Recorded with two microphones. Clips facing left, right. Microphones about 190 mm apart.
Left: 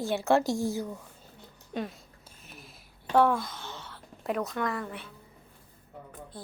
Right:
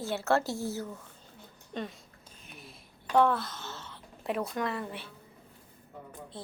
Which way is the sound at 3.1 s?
10° left (ahead or behind).